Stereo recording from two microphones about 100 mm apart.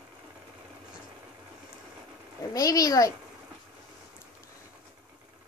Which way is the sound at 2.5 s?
35° left (ahead or behind).